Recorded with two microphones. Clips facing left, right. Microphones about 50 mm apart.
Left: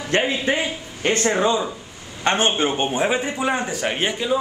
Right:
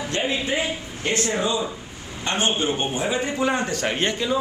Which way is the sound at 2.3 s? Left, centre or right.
Left.